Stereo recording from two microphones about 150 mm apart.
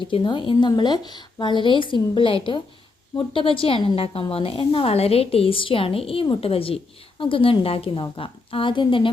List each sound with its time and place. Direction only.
0.0 s a woman's voice: 30° left (ahead or behind)